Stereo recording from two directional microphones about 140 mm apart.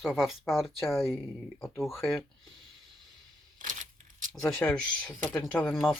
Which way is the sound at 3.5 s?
65° right (ahead or behind).